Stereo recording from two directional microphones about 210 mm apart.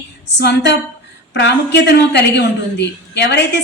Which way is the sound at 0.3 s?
55° left (ahead or behind).